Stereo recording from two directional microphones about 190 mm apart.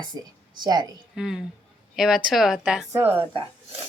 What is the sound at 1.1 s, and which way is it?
A woman's voice, centre (ahead or behind).